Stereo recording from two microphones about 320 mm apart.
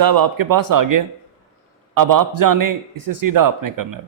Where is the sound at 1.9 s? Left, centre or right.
Right.